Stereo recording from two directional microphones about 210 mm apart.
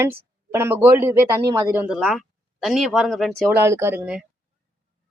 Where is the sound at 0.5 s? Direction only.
10° right (ahead or behind).